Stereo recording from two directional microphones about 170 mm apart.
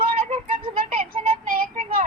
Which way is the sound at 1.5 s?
50° right (ahead or behind).